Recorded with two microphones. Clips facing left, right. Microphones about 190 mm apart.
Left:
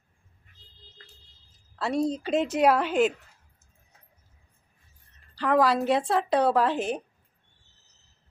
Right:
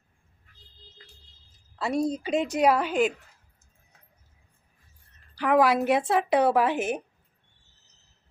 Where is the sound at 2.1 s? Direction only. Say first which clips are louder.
Left 1 dB; centre (ahead or behind).